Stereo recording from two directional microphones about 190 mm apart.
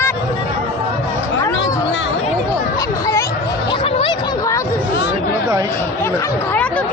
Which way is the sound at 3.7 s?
25° left (ahead or behind).